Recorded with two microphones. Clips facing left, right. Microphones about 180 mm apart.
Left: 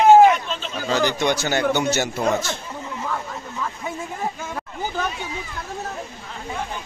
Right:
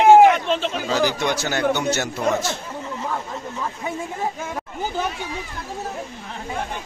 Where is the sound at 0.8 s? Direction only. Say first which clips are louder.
Left 2 dB; 5° right (ahead or behind).